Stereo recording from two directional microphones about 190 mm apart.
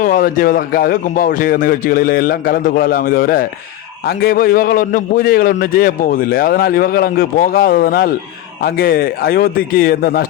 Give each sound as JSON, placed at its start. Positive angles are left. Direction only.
{"t": 0.0, "sound": "a man's voice", "side_deg": 45}